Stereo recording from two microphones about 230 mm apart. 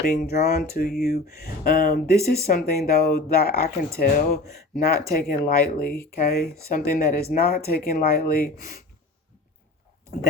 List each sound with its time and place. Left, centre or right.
0.0 s speech: left